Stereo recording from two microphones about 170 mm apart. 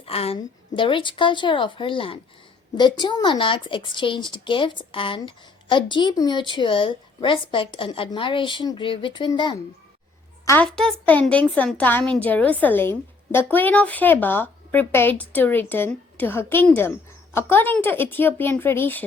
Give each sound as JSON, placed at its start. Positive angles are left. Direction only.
{"t": 0.0, "sound": "a woman's voice", "side_deg": 35}
{"t": 10.4, "sound": "a child's voice", "side_deg": 15}
{"t": 10.7, "sound": "speech", "side_deg": 5}